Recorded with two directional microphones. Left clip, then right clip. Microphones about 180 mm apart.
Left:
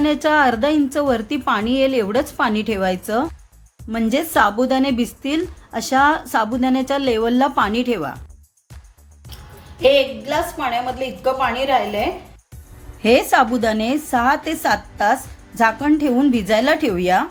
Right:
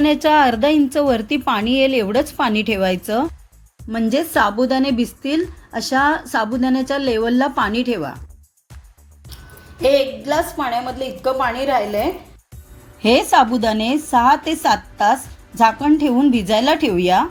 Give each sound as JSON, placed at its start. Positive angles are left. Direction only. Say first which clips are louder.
{"t": 0.0, "sound": "a woman's voice", "louder": "right 2 dB", "side_deg": -10}
{"t": 3.8, "sound": "a woman's voice", "louder": "right 1 dB", "side_deg": 0}
{"t": 9.8, "sound": "a woman's voice", "louder": "left 1 dB", "side_deg": -25}
{"t": 13.0, "sound": "a woman's voice", "louder": "right 1 dB", "side_deg": -5}